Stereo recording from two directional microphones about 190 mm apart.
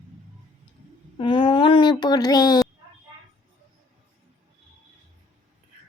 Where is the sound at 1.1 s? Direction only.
25° left (ahead or behind).